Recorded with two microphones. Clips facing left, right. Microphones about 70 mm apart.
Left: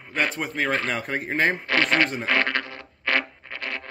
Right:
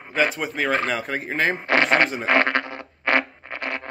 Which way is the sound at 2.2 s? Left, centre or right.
Right.